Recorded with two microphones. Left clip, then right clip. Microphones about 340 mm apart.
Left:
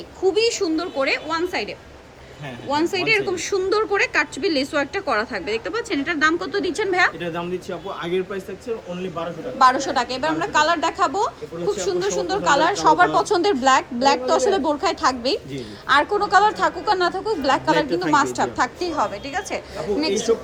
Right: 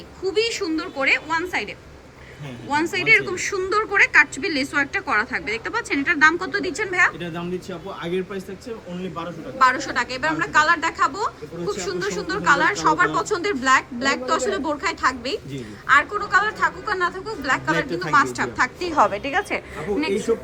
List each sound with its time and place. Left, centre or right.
0.3 s a woman's voice: centre
7.2 s speech: centre
9.6 s a woman's voice: centre
17.8 s speech: centre
18.3 s a woman's voice: centre